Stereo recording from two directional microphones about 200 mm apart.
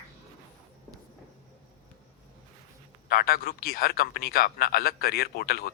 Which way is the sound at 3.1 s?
50° left (ahead or behind).